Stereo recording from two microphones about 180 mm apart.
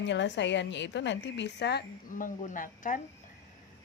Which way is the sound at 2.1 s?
45° left (ahead or behind).